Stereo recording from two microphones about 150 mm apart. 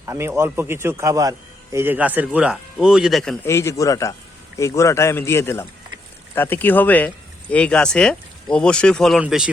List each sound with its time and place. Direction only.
0.0 s a man's voice: 15° right (ahead or behind); by 3.3 s centre (ahead or behind)
3.4 s a man's voice: 20° left (ahead or behind); by 9.5 s 5° right (ahead or behind)